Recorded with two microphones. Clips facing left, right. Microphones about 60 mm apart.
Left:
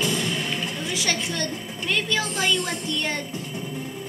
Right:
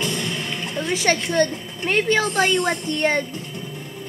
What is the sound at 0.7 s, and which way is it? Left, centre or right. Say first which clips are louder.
A woman's voice: right 11 dB; right.